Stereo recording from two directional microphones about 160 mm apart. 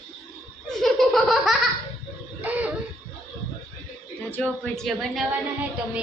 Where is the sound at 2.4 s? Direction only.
10° right (ahead or behind).